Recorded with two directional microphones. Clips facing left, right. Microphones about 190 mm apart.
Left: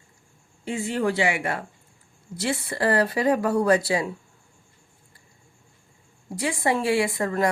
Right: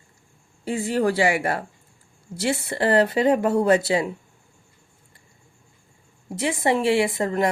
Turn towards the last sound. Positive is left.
turn(degrees=-25)  # may be behind; listen again after turning